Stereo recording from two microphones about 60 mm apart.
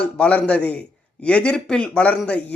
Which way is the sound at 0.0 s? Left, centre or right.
Centre.